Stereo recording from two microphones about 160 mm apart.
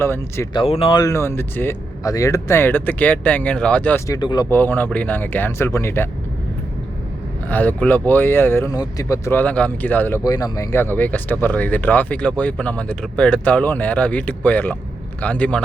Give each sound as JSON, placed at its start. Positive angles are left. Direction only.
{"t": 0.0, "sound": "speech", "side_deg": 15}
{"t": 0.5, "sound": "speech", "side_deg": 35}
{"t": 4.4, "sound": "speech", "side_deg": 10}
{"t": 7.4, "sound": "speech", "side_deg": 10}
{"t": 10.2, "sound": "speech", "side_deg": 20}